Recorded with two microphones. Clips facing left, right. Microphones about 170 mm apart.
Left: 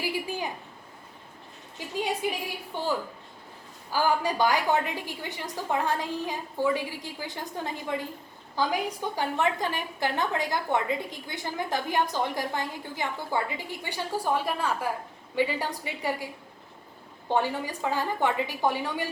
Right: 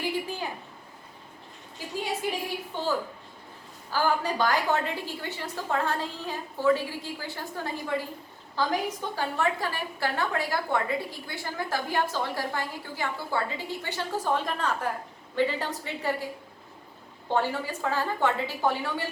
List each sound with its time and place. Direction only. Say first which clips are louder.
0.0 s a sound: even; 10° left (ahead or behind)
2.7 s a woman's voice: even; 15° left (ahead or behind)
3.9 s a woman's voice: left 1 dB; 10° left (ahead or behind)
17.2 s a woman's voice: even; 15° left (ahead or behind)